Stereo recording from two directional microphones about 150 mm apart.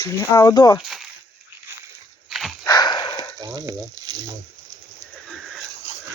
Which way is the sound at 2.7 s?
25° left (ahead or behind).